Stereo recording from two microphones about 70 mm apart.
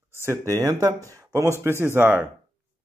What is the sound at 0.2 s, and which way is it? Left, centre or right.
Speech, right.